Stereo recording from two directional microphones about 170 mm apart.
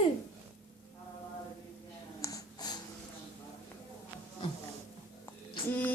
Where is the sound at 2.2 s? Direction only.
20° left (ahead or behind).